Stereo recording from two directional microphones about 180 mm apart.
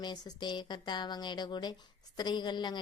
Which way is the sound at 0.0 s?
25° left (ahead or behind).